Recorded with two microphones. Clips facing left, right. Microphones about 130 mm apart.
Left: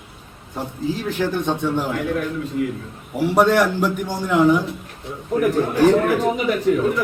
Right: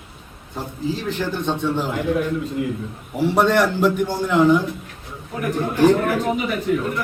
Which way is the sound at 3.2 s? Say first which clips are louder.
Left 1 dB; 10° left (ahead or behind).